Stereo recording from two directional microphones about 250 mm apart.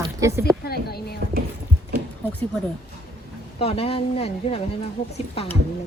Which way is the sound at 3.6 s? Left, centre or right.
Left.